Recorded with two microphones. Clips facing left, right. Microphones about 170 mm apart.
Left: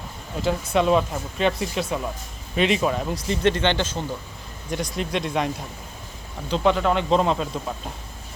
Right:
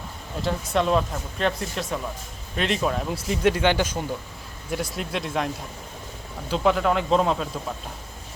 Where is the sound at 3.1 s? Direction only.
10° right (ahead or behind).